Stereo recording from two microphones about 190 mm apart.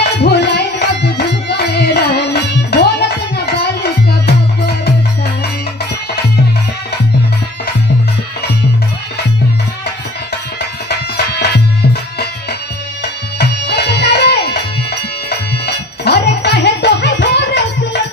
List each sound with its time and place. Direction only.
0.2 s music: 65° left (ahead or behind)
10.6 s music: 60° left (ahead or behind)